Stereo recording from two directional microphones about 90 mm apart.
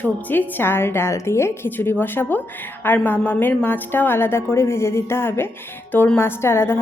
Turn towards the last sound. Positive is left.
turn(degrees=25)  # may be behind; listen again after turning